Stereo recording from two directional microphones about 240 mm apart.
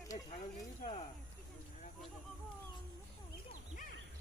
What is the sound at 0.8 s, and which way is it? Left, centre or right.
Speech, left.